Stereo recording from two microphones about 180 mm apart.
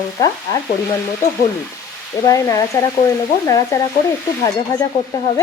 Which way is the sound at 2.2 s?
20° left (ahead or behind).